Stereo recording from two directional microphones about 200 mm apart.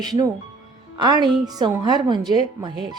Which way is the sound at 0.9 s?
20° right (ahead or behind).